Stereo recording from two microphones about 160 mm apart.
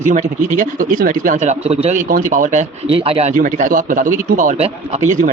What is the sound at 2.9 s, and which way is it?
Speech, 35° right (ahead or behind).